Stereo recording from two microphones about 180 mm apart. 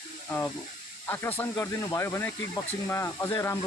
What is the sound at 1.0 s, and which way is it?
Speech, 10° left (ahead or behind).